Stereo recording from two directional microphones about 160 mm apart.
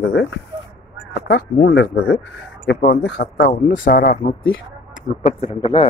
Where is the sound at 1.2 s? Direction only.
85° left.